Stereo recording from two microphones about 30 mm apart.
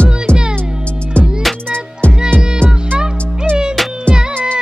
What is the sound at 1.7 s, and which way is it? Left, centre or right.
Music, left.